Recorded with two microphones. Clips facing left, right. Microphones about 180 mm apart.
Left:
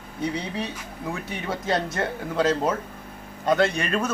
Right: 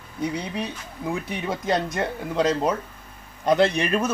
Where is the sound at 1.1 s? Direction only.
15° right (ahead or behind).